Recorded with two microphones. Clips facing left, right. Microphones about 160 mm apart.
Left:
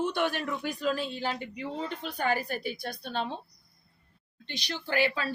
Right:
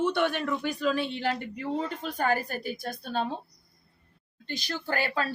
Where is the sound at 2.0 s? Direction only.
45° right (ahead or behind).